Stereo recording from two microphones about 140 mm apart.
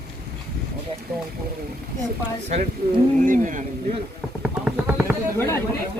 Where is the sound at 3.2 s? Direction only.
70° right (ahead or behind).